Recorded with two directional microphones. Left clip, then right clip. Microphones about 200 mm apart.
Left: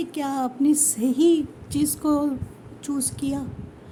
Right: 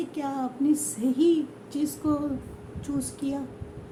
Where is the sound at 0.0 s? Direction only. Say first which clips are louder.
Left 4 dB; 50° left (ahead or behind).